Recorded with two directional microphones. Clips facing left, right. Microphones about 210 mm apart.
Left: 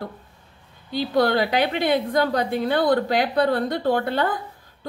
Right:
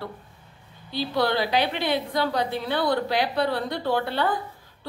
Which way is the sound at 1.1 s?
50° left (ahead or behind).